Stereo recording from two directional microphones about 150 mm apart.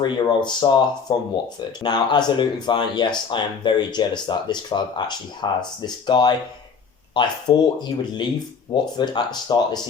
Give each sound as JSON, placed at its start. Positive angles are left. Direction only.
{"t": 0.0, "sound": "speech", "side_deg": 30}